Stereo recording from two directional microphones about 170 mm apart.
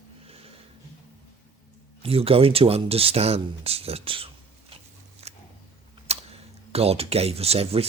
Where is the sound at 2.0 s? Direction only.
35° right (ahead or behind).